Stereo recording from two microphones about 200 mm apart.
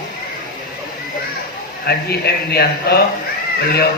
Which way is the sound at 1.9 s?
50° left (ahead or behind).